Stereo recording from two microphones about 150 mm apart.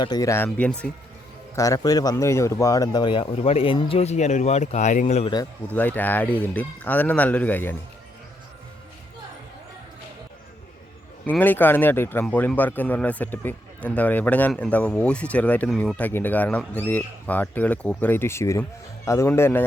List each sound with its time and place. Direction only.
0.0 s a man's voice: 25° left (ahead or behind); by 0.9 s 10° left (ahead or behind)
1.5 s speech: 20° left (ahead or behind); by 5.3 s 50° left (ahead or behind)
5.7 s a man's voice: 10° left (ahead or behind)
11.3 s a man's voice: 10° left (ahead or behind)